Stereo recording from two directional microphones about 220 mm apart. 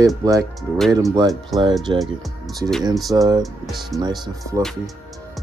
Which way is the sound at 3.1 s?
15° right (ahead or behind).